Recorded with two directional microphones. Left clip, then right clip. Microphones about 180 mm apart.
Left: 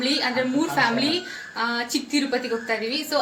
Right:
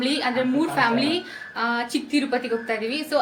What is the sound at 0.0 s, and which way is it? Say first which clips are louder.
A woman's voice: even; centre (ahead or behind).